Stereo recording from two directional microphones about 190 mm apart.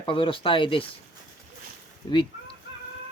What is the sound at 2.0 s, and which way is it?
Speech, 25° left (ahead or behind).